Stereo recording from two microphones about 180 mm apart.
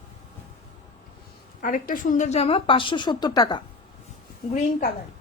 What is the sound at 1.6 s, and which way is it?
A woman's voice, 50° left (ahead or behind).